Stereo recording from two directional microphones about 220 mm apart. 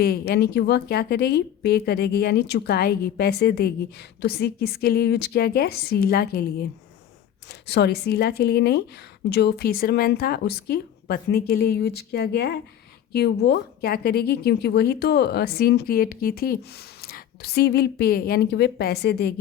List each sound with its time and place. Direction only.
0.0 s a woman's voice: 45° left (ahead or behind)